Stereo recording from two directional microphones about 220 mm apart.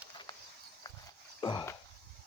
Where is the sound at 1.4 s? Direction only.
20° left (ahead or behind).